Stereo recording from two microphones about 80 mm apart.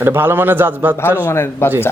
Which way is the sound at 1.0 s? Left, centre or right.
Left.